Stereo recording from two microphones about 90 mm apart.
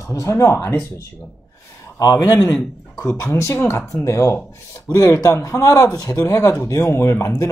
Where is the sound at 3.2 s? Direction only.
35° left (ahead or behind).